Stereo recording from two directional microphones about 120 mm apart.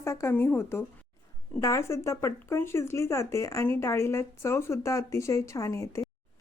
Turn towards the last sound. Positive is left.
turn(degrees=25)  # may be behind; listen again after turning